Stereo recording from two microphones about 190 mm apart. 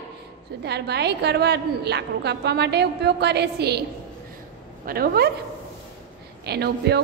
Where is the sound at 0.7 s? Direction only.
60° right (ahead or behind).